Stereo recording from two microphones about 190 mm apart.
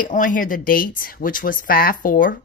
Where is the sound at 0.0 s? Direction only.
45° left (ahead or behind).